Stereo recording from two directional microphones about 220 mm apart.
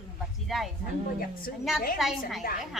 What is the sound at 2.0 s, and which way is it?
Speech, centre (ahead or behind).